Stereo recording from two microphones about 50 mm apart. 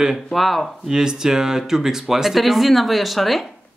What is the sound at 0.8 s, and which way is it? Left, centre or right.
Speech, centre.